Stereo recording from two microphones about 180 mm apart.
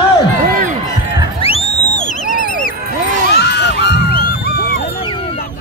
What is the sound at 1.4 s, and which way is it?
Music, 35° left (ahead or behind).